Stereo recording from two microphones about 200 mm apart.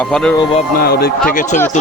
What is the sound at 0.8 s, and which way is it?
Speech, 50° left (ahead or behind).